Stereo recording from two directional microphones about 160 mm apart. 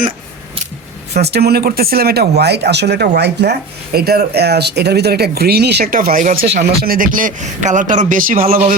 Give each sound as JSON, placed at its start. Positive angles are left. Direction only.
{"t": 1.2, "sound": "speech", "side_deg": -85}
{"t": 3.9, "sound": "speech", "side_deg": -75}
{"t": 6.4, "sound": "speech", "side_deg": -80}
{"t": 6.7, "sound": "speech", "side_deg": -65}